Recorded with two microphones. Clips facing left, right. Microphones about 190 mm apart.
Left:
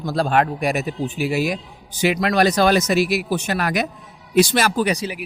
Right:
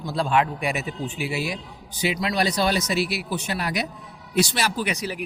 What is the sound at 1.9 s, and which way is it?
Speech, 90° left.